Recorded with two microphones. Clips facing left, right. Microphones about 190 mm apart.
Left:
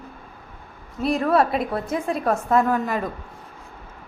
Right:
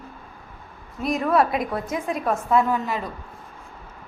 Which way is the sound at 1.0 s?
30° left (ahead or behind).